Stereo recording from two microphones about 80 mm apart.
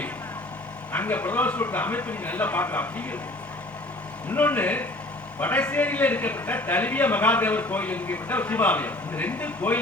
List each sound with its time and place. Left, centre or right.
0.9 s a man's voice: left
4.3 s a man's voice: left